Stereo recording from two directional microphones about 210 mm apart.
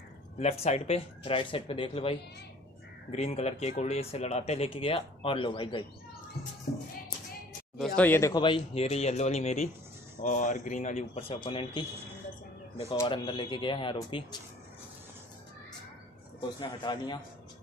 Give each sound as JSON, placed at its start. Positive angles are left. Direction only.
{"t": 0.4, "sound": "speech", "side_deg": 30}
{"t": 6.7, "sound": "music", "side_deg": 55}
{"t": 7.7, "sound": "speech", "side_deg": 5}
{"t": 12.9, "sound": "speech", "side_deg": 20}
{"t": 16.3, "sound": "speech", "side_deg": 20}